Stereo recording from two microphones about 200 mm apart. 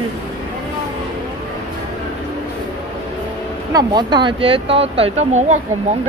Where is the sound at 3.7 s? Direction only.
20° right (ahead or behind).